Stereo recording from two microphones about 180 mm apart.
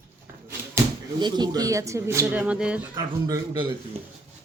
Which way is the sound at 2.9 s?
25° right (ahead or behind).